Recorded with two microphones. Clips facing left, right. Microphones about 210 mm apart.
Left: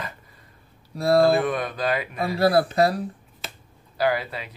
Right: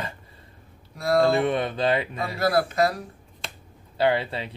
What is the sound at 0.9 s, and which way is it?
Speech, 30° left (ahead or behind).